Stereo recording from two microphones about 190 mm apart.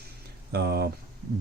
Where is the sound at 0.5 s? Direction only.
60° right (ahead or behind).